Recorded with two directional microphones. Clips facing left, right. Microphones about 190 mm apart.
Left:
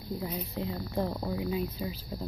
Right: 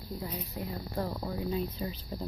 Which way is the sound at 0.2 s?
25° left (ahead or behind).